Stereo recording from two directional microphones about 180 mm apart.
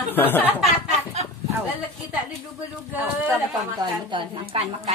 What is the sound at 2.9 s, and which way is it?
Speech, 10° right (ahead or behind).